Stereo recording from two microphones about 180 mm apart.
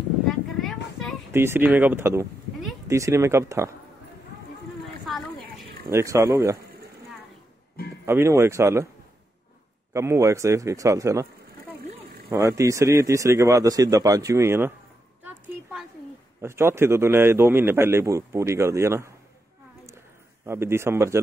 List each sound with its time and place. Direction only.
1.3 s a man's voice: 15° right (ahead or behind)
5.9 s a man's voice: 15° right (ahead or behind)
8.0 s a man's voice: 15° right (ahead or behind)
9.9 s a man's voice: 15° right (ahead or behind)
12.3 s a man's voice: 15° right (ahead or behind)
15.2 s a sound: 5° right (ahead or behind)
16.3 s a man's voice: 15° right (ahead or behind)
20.4 s a man's voice: 15° right (ahead or behind)